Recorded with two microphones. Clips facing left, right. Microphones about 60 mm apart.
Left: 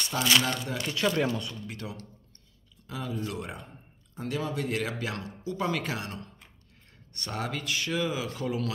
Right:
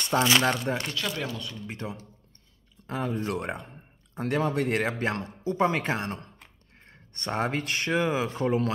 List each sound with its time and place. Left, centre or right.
0.1 s speech: right
0.4 s speech: right
1.0 s speech: centre
1.7 s speech: right
2.9 s speech: right